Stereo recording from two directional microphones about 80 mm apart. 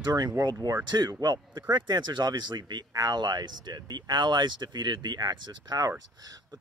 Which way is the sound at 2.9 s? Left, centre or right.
Right.